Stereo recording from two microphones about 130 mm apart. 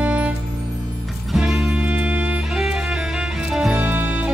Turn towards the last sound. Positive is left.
turn(degrees=-20)  # may be behind; listen again after turning